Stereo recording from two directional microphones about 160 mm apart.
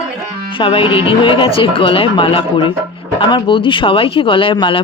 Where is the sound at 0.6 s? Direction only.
30° left (ahead or behind).